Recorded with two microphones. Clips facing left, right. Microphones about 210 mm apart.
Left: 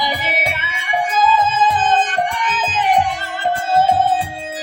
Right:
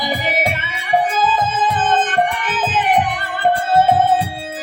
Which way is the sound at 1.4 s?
55° right (ahead or behind).